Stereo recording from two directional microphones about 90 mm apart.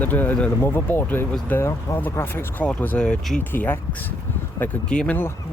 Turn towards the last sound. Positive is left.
turn(degrees=15)  # may be behind; listen again after turning